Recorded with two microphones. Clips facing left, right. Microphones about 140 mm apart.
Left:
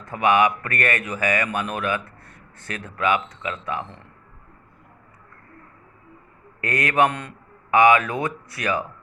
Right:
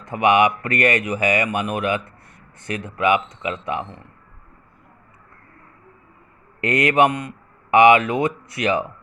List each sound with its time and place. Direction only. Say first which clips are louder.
0.0 s speech: right 2 dB; 20° right (ahead or behind)
6.6 s speech: right 3 dB; 20° right (ahead or behind)